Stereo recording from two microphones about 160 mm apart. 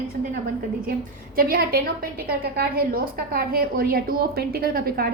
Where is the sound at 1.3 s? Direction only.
70° right (ahead or behind).